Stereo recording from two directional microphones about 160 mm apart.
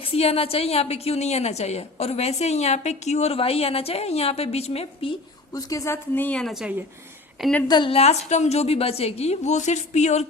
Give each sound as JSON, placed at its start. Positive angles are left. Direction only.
{"t": 0.0, "sound": "a woman's voice", "side_deg": 35}
{"t": 5.5, "sound": "a woman's voice", "side_deg": 20}
{"t": 7.7, "sound": "a woman's voice", "side_deg": 30}